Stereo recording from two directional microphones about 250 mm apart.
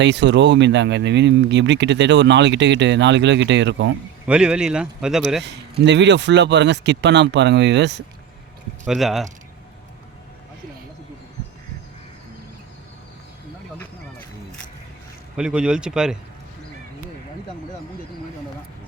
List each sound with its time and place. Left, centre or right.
0.0 s speech: right
4.3 s speech: centre
5.8 s speech: right
8.8 s speech: centre
15.4 s speech: centre